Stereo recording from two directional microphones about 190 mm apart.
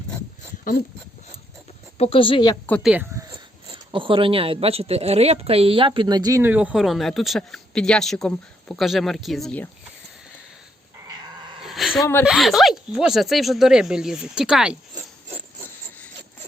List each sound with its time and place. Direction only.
2.0 s speech: 30° left (ahead or behind)
2.8 s speech: 10° right (ahead or behind)
3.3 s speech: 25° right (ahead or behind); by 9.6 s 5° left (ahead or behind)
11.0 s dog: 20° right (ahead or behind)
11.6 s a sound: centre (ahead or behind)
12.2 s speech: centre (ahead or behind)